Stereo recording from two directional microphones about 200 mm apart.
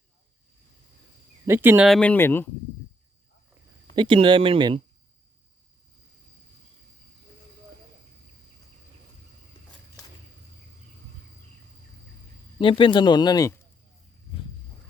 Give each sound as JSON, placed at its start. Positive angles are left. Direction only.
{"t": 1.5, "sound": "speech", "side_deg": -10}
{"t": 1.9, "sound": "speech", "side_deg": 5}
{"t": 3.9, "sound": "speech", "side_deg": -25}
{"t": 12.5, "sound": "speech", "side_deg": 25}